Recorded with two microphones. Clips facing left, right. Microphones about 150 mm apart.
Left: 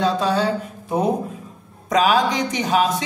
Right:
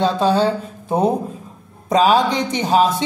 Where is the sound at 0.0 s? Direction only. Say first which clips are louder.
Right 3 dB; 30° right (ahead or behind).